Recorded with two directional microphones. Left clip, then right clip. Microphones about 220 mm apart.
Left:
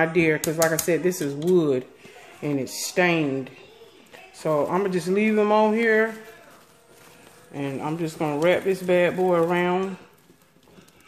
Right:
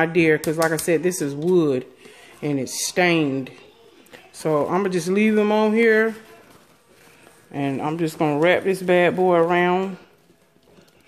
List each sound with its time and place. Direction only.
0.0 s speech: 30° right (ahead or behind)
7.5 s speech: 40° right (ahead or behind)